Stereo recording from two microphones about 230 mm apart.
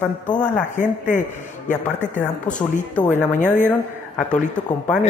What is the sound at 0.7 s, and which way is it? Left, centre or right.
Speech, left.